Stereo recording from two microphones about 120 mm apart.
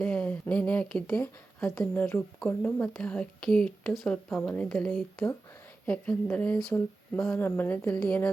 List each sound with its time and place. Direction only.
0.0 s speech: 10° left (ahead or behind)